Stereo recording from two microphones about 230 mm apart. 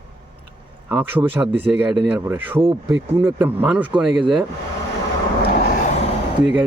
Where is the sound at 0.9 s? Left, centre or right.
Centre.